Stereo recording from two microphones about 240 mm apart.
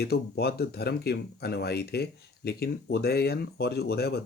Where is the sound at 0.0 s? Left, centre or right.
Left.